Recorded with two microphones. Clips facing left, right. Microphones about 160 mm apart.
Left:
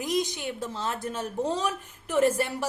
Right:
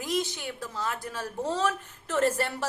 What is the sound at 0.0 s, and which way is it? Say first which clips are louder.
A woman's voice: left 2 dB; 15° left (ahead or behind).